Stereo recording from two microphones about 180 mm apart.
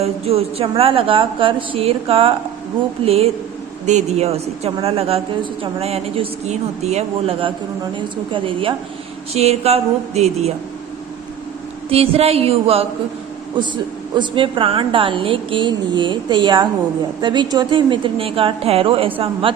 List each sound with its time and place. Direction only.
0.0 s a woman's voice: 35° right (ahead or behind)
11.9 s a woman's voice: 35° right (ahead or behind)